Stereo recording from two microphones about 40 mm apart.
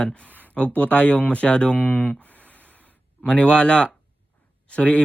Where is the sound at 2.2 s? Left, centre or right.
Left.